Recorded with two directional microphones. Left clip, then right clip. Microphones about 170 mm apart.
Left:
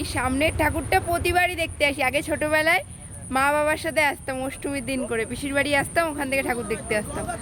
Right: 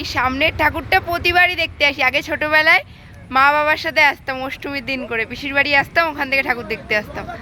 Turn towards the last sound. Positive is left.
turn(degrees=10)  # may be behind; listen again after turning